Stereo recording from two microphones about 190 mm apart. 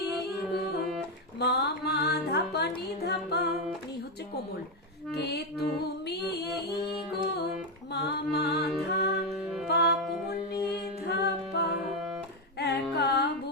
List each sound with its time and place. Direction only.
1.4 s music: 60° left (ahead or behind)
5.1 s music: 60° left (ahead or behind)
10.0 s music: centre (ahead or behind)
10.5 s a capella: 60° left (ahead or behind)
12.5 s female singing: 60° left (ahead or behind)